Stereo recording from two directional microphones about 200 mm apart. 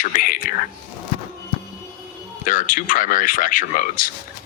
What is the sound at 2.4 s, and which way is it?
Speech, 40° left (ahead or behind).